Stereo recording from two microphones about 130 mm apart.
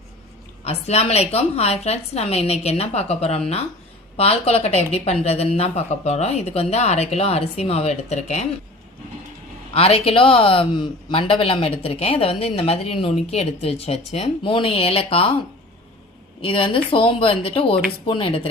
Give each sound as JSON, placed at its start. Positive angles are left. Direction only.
{"t": 0.6, "sound": "speech", "side_deg": 50}
{"t": 9.7, "sound": "speech", "side_deg": 45}
{"t": 16.4, "sound": "speech", "side_deg": 45}